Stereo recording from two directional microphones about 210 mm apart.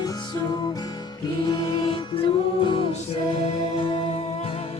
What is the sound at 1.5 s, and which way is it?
Music, 20° left (ahead or behind).